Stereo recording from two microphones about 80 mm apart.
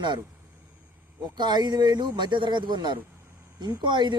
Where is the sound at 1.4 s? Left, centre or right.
Right.